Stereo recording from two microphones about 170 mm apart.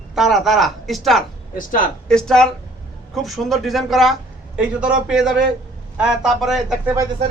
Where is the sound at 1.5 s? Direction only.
55° left (ahead or behind).